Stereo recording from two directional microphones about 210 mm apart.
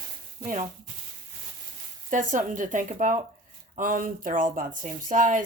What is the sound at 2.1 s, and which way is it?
Speech, 40° right (ahead or behind).